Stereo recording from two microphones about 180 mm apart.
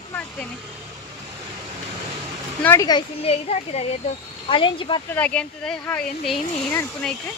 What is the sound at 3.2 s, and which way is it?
Speech, 35° left (ahead or behind).